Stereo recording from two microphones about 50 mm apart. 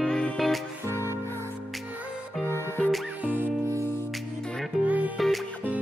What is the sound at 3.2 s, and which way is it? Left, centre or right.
Music, right.